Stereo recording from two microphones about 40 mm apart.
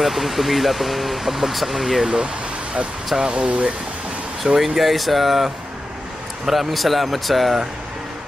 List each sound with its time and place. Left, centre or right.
0.0 s speech: centre
3.2 s speech: right
4.6 s speech: centre